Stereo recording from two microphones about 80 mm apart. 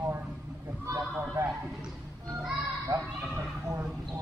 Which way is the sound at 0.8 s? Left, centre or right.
Right.